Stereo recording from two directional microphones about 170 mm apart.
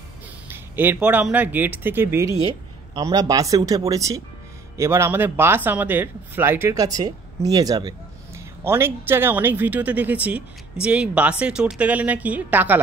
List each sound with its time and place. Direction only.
0.5 s speech: 10° right (ahead or behind)
2.4 s speech: 30° right (ahead or behind); by 12.8 s 10° right (ahead or behind)